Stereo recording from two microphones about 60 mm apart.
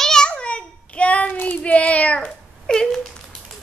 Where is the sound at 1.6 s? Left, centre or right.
Left.